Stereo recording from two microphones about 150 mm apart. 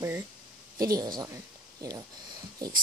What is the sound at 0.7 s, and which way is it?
Speech, 25° right (ahead or behind).